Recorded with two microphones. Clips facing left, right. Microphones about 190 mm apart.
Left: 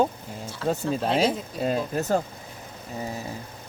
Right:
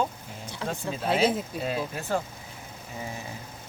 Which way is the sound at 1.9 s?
40° left (ahead or behind).